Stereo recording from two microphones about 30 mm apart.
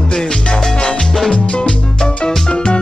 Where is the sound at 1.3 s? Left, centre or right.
Left.